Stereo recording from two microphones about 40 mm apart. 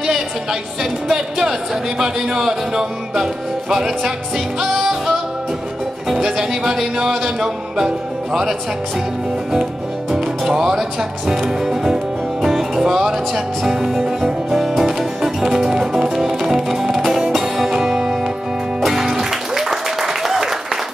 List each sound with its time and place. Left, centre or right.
0.0 s a sound: centre
1.0 s music: centre
6.0 s music: centre
10.1 s speech: centre
14.5 s music: centre
17.0 s music: centre
17.3 s music: centre